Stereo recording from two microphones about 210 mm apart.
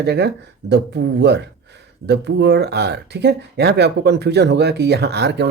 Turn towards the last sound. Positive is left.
turn(degrees=-55)  # may be behind; listen again after turning